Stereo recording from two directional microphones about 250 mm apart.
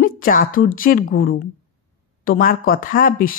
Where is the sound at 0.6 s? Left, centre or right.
Left.